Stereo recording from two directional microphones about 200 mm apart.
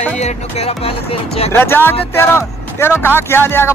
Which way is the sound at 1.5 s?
10° left (ahead or behind).